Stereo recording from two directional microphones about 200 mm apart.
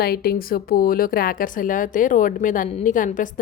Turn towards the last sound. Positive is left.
turn(degrees=40)  # may be behind; listen again after turning